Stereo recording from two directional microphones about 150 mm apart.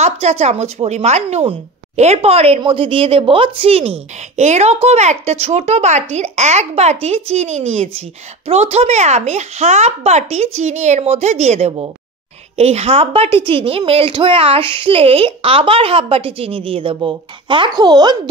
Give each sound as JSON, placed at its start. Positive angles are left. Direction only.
{"t": 0.0, "sound": "a woman's voice", "side_deg": -45}